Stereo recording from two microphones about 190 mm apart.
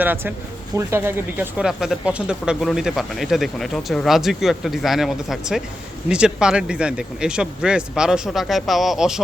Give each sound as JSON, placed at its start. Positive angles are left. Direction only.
{"t": 0.0, "sound": "speech", "side_deg": -10}